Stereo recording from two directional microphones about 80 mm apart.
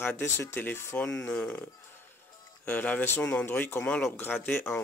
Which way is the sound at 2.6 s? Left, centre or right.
Centre.